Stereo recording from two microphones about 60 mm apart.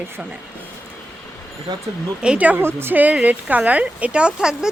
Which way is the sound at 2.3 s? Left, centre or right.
Right.